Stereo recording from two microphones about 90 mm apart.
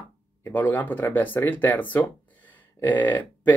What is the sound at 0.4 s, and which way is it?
Speech, 25° left (ahead or behind).